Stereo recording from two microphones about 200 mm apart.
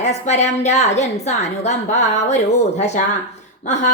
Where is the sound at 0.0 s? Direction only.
35° left (ahead or behind).